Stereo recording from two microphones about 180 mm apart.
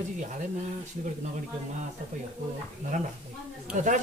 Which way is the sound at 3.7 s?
45° right (ahead or behind).